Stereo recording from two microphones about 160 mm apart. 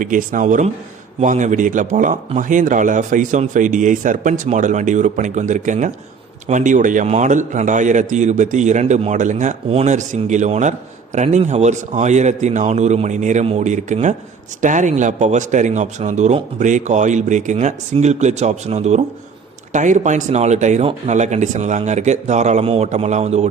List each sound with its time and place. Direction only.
0.0 s a man's voice: 55° right (ahead or behind)